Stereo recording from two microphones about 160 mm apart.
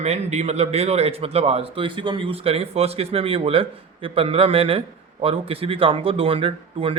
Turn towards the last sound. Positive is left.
turn(degrees=-35)  # may be behind; listen again after turning